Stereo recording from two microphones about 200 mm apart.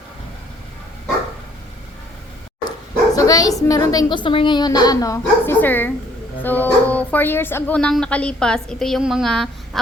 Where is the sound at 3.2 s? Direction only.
20° left (ahead or behind).